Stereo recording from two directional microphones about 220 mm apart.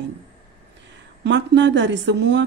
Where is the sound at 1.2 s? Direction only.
55° right (ahead or behind).